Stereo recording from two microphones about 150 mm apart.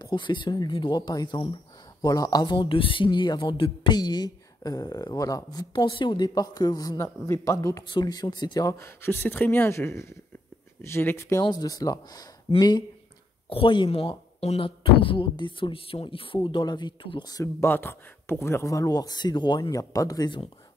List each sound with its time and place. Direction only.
0.0 s speech: 30° left (ahead or behind)